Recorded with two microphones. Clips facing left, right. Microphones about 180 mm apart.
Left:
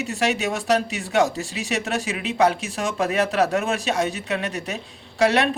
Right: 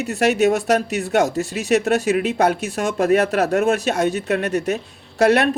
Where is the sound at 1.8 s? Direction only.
50° right (ahead or behind).